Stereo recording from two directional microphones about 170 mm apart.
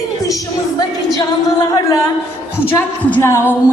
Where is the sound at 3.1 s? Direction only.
15° left (ahead or behind).